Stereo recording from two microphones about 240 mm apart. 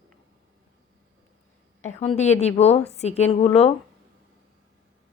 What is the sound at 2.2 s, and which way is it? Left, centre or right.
A woman's voice, left.